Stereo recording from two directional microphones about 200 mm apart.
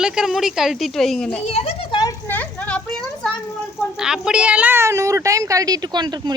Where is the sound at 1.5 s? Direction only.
30° left (ahead or behind); by 2.8 s 5° left (ahead or behind).